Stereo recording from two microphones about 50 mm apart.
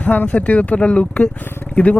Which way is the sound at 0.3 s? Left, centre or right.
Left.